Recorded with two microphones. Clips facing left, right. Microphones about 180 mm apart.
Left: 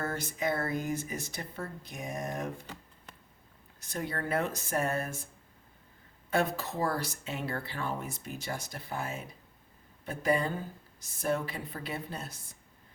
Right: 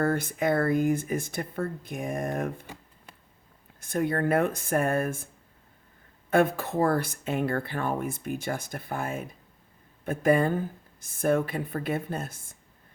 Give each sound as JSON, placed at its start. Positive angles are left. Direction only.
{"t": 0.0, "sound": "speech", "side_deg": -55}
{"t": 3.8, "sound": "speech", "side_deg": -50}
{"t": 6.3, "sound": "speech", "side_deg": -55}